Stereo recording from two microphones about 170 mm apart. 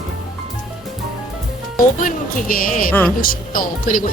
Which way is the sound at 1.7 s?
55° left (ahead or behind).